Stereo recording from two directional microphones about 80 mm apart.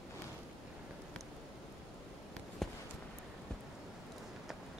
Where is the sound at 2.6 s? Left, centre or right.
Centre.